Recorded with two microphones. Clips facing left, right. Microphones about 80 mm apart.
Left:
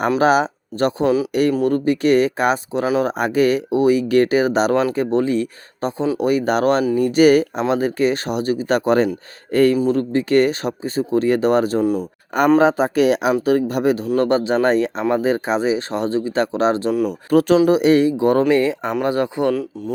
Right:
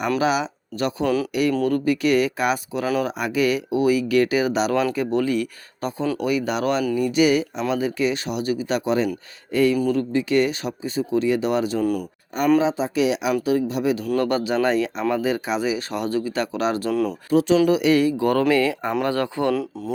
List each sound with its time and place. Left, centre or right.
0.2 s speech: left
1.0 s speech: centre
1.3 s speech: left
2.8 s speech: left
3.1 s speech: left
4.7 s speech: left
11.8 s speech: left
12.5 s speech: left
14.0 s speech: left
16.9 s speech: centre
17.7 s speech: left; by 19.5 s centre